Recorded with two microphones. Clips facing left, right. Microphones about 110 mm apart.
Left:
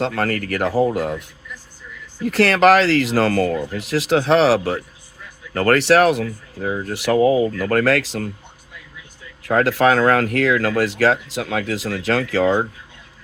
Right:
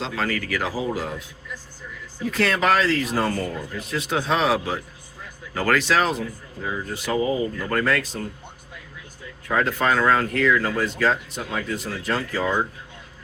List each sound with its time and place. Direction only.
0.0 s speech: 55° left (ahead or behind)
2.2 s speech: 70° left (ahead or behind)
6.9 s speech: 70° left (ahead or behind); by 8.3 s 90° left
9.4 s speech: 70° left (ahead or behind)